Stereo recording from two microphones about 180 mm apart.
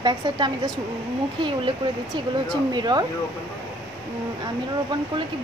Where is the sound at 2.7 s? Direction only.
25° right (ahead or behind).